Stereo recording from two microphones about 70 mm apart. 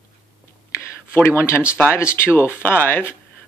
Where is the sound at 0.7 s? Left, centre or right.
Left.